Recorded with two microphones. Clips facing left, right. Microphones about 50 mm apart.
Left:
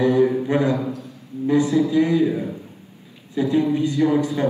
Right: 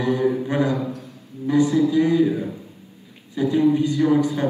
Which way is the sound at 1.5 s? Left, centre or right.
Left.